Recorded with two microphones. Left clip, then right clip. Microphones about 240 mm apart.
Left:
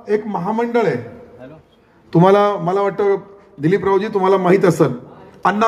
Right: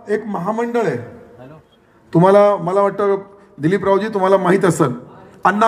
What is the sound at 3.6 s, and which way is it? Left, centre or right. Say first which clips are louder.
A man's voice: even; right.